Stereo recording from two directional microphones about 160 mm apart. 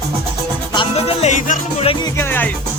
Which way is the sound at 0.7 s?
40° left (ahead or behind).